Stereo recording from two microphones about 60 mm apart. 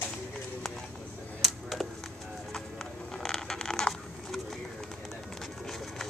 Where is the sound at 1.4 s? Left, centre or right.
Centre.